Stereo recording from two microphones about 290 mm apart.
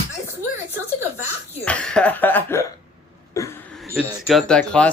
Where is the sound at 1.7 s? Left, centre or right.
Centre.